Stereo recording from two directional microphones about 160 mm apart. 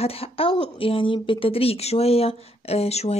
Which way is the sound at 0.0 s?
35° left (ahead or behind).